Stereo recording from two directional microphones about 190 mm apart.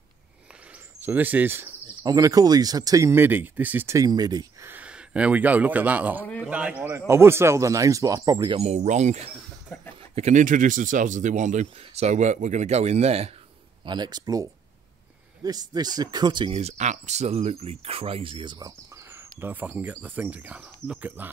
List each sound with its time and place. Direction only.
1.0 s speech: 10° right (ahead or behind)
6.2 s speech: 5° left (ahead or behind)
6.5 s speech: 5° right (ahead or behind)
8.5 s speech: 35° right (ahead or behind)
9.7 s speech: 10° left (ahead or behind)
10.1 s speech: 40° right (ahead or behind)
13.8 s speech: 20° right (ahead or behind)